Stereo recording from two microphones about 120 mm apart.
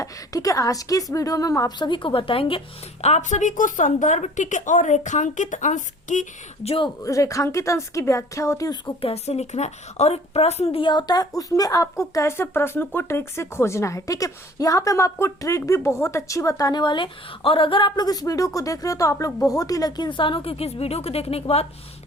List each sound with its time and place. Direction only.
0.0 s a woman's voice: 30° left (ahead or behind); by 2.6 s 50° left (ahead or behind)
3.0 s a woman's voice: 75° left (ahead or behind)
6.7 s speech: 45° left (ahead or behind)
7.0 s a woman's voice: 25° left (ahead or behind)
9.0 s a woman's voice: 55° left (ahead or behind)